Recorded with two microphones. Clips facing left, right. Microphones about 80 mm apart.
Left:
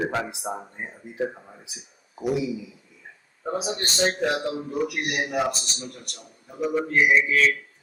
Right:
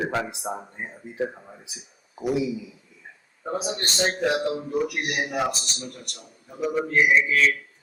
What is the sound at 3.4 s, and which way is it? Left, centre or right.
Speech, centre.